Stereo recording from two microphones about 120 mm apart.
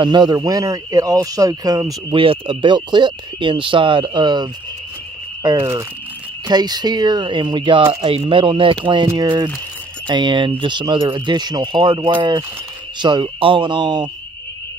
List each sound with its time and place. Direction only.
0.0 s speech: 40° right (ahead or behind)
2.1 s speech: 45° right (ahead or behind)